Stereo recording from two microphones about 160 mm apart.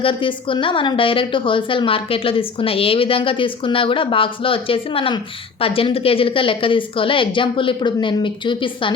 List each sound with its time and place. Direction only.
0.0 s a woman's voice: 35° left (ahead or behind)